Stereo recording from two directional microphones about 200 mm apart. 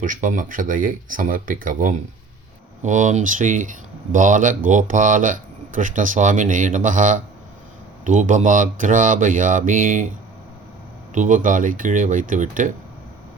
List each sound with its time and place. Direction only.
0.0 s speech: 40° right (ahead or behind)
11.1 s speech: 40° right (ahead or behind)